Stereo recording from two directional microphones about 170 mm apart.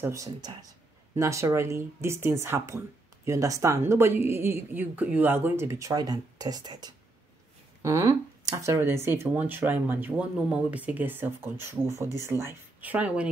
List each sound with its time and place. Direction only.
0.0 s speech: 20° right (ahead or behind)